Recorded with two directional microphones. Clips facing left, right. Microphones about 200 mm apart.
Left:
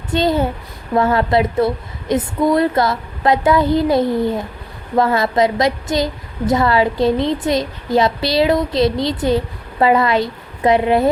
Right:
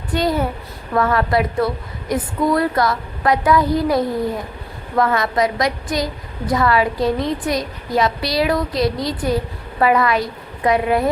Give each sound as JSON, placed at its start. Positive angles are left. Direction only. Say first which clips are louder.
{"t": 0.1, "sound": "a woman's voice", "louder": "left 3 dB", "side_deg": 25}